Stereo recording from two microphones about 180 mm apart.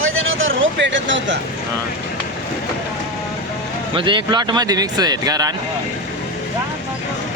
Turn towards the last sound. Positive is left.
turn(degrees=-20)  # may be behind; listen again after turning